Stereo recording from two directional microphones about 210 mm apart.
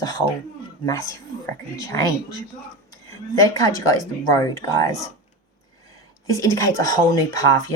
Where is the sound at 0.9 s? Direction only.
15° left (ahead or behind).